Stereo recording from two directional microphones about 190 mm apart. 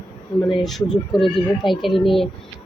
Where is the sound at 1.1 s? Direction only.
Centre (ahead or behind).